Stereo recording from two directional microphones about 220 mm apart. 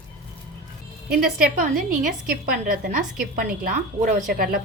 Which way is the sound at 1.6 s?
35° right (ahead or behind).